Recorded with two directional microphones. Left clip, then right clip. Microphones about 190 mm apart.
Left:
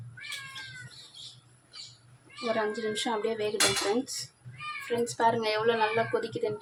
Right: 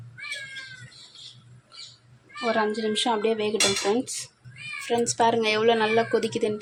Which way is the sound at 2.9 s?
10° right (ahead or behind).